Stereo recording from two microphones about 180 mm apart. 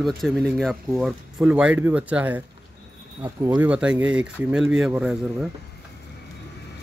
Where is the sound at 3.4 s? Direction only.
10° right (ahead or behind).